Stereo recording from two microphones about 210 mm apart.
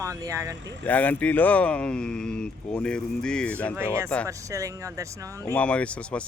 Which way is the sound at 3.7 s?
10° right (ahead or behind).